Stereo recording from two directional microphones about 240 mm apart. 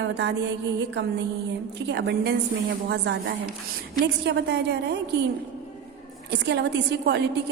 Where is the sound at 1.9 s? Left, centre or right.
Right.